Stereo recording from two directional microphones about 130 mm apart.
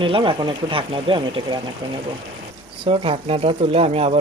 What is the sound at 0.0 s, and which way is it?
Speech, 40° right (ahead or behind).